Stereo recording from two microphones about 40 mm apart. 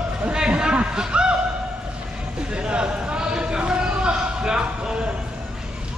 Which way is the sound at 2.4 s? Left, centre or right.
Right.